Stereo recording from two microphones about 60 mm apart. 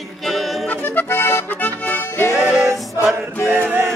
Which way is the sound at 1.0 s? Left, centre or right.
Left.